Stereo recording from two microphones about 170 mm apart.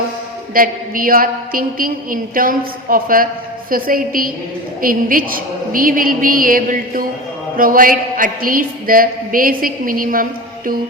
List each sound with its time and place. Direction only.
0.5 s a man's voice: 55° right (ahead or behind)